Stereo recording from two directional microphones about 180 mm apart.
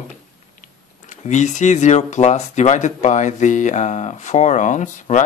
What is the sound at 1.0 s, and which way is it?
Speech, 40° left (ahead or behind).